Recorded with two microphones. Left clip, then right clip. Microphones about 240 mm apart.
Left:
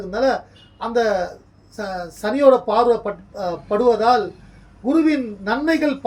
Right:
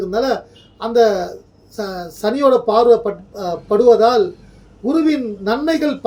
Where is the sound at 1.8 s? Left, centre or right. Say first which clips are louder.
Right 4 dB; centre.